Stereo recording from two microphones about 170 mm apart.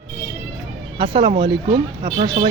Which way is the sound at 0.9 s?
30° right (ahead or behind).